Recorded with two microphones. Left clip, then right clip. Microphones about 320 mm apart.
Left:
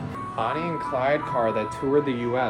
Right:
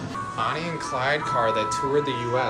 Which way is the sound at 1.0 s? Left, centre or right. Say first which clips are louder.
Right 1 dB; centre.